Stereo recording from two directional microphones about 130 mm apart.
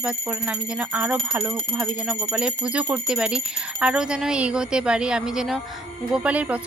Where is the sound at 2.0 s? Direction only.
5° right (ahead or behind).